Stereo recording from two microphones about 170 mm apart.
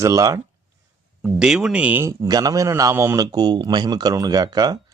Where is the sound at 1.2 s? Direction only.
5° right (ahead or behind).